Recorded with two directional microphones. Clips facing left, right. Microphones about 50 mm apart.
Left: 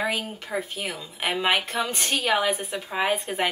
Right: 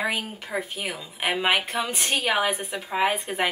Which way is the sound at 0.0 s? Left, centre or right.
Centre.